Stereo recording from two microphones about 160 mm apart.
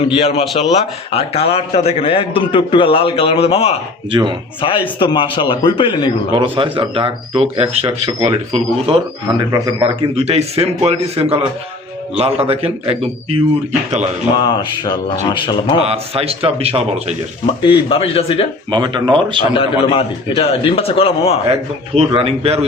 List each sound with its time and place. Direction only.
0.0 s a man's voice: 35° left (ahead or behind)
6.3 s speech: 30° right (ahead or behind)
14.3 s a sound: 25° left (ahead or behind)
15.8 s speech: 40° right (ahead or behind)
17.7 s a man's voice: 35° left (ahead or behind)
18.7 s speech: 30° right (ahead or behind)
19.5 s a man's voice: 35° left (ahead or behind)
21.5 s speech: 35° right (ahead or behind)